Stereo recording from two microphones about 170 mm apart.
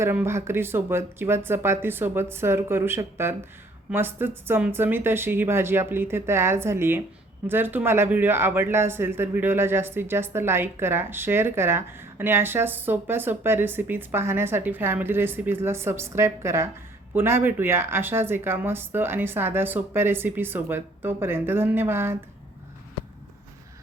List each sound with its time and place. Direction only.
0.0 s speech: 15° right (ahead or behind)